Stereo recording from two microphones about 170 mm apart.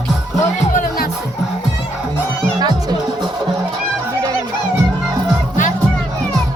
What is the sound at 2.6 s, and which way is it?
Music, 25° right (ahead or behind).